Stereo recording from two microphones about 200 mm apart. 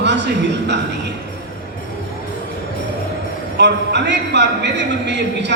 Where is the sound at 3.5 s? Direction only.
60° right (ahead or behind).